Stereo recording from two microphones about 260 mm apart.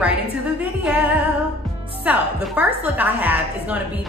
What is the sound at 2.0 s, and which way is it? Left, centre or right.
A woman's voice, centre.